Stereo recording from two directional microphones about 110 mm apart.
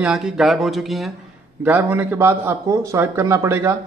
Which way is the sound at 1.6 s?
15° right (ahead or behind).